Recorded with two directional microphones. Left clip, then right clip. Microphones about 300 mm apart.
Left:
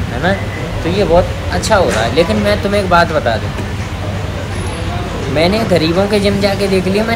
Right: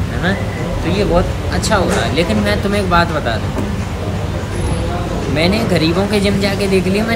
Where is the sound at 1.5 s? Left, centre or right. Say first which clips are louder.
Left 4 dB; centre.